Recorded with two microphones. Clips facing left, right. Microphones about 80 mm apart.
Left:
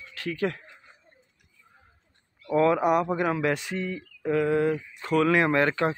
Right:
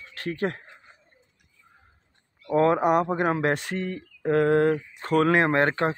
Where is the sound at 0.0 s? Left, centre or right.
Right.